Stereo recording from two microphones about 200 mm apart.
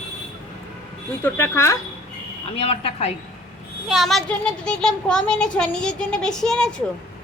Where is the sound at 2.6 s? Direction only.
30° left (ahead or behind).